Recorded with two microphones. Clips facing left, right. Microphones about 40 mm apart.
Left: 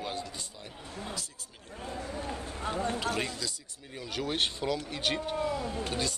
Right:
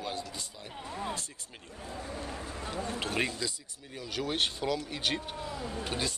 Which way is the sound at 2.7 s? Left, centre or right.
Left.